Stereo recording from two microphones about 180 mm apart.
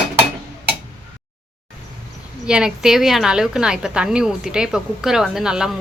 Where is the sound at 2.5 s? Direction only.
5° right (ahead or behind).